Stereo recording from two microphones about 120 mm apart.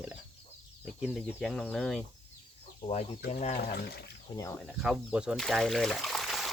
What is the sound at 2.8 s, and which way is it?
Speech, 60° left (ahead or behind).